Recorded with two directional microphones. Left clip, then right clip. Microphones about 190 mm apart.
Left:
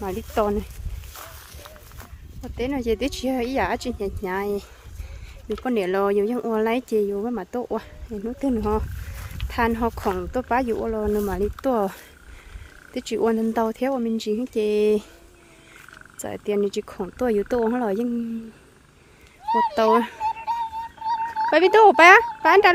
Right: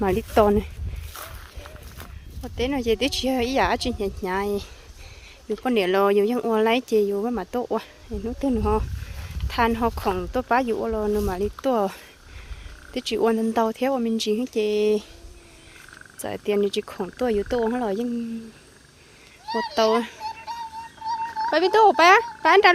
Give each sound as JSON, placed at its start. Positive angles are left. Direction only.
{"t": 0.0, "sound": "speech", "side_deg": -20}
{"t": 2.4, "sound": "speech", "side_deg": 5}
{"t": 14.6, "sound": "speech", "side_deg": 20}
{"t": 16.2, "sound": "speech", "side_deg": 5}
{"t": 19.5, "sound": "a child's voice", "side_deg": 45}
{"t": 19.7, "sound": "speech", "side_deg": 20}
{"t": 20.2, "sound": "a sound", "side_deg": 50}
{"t": 21.3, "sound": "speech", "side_deg": 30}